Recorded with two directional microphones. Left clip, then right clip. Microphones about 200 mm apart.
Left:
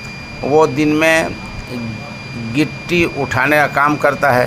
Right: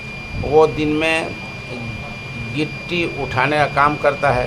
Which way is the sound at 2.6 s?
20° left (ahead or behind).